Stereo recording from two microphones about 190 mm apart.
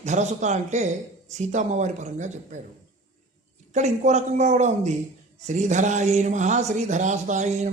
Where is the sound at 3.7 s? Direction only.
40° right (ahead or behind).